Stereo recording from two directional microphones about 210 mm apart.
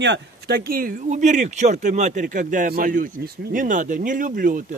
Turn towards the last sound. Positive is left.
turn(degrees=-40)  # may be behind; listen again after turning